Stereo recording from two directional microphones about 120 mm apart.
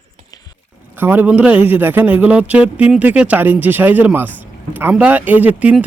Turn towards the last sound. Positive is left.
turn(degrees=-15)  # may be behind; listen again after turning